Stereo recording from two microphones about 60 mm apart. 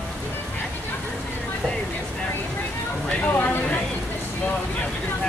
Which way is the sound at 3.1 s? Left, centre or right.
Left.